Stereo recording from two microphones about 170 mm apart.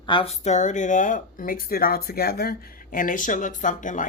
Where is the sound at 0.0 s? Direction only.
30° left (ahead or behind).